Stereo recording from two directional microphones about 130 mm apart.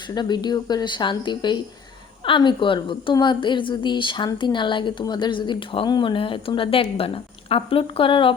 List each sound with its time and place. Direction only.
0.1 s a woman's voice: 35° left (ahead or behind)